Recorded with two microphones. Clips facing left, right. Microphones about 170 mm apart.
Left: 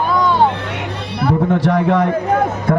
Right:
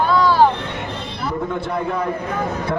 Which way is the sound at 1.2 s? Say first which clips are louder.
Left 9 dB; 90° left.